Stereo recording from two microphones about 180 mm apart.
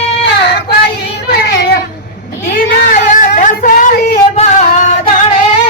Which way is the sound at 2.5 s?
45° left (ahead or behind).